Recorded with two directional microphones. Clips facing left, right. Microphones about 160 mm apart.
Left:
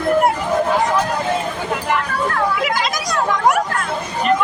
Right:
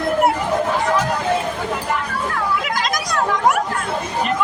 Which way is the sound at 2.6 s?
5° left (ahead or behind).